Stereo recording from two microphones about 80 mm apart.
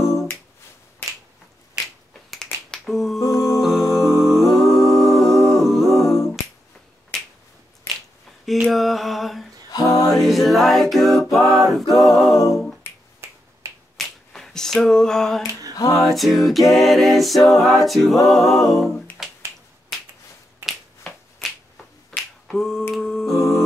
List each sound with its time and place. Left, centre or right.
2.3 s finger snapping: centre
3.2 s music: left
3.9 s humming: centre
8.7 s mantra: centre
9.7 s a sound: left
10.1 s a capella: centre
13.9 s finger snapping: centre
15.7 s a sound: left
16.0 s a capella: centre
20.6 s finger snapping: right
22.5 s finger snapping: centre
22.9 s a sound: centre